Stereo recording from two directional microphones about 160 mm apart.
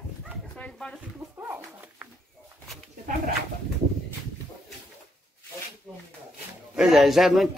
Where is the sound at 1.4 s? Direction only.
10° right (ahead or behind).